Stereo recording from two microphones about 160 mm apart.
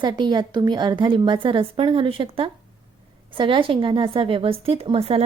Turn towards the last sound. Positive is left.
turn(degrees=-35)  # may be behind; listen again after turning